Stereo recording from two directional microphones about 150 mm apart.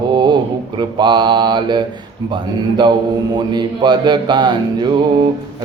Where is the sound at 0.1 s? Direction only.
30° right (ahead or behind).